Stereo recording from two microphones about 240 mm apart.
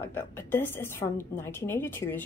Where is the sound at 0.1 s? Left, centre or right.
Centre.